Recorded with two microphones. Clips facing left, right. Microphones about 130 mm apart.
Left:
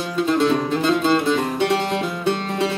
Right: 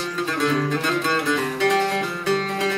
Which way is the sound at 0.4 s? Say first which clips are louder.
Even; 20° left (ahead or behind).